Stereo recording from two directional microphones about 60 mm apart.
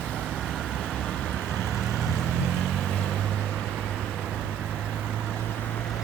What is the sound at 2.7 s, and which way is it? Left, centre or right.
Boat, left.